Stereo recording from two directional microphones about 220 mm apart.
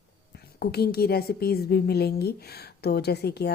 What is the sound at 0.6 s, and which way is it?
A woman's voice, 45° left (ahead or behind).